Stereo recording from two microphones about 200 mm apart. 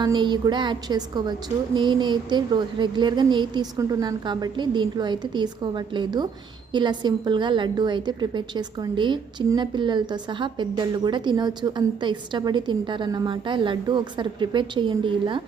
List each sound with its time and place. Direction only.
0.0 s a woman's voice: 20° right (ahead or behind)